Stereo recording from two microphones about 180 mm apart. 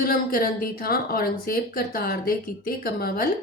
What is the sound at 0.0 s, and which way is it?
Speech, 55° left (ahead or behind).